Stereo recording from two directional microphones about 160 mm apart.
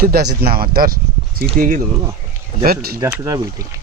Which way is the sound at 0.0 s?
85° right.